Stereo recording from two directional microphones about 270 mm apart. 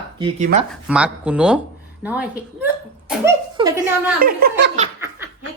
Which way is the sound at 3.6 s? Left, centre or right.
Centre.